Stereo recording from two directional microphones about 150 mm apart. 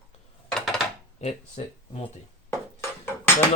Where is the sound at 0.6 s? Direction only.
Centre (ahead or behind).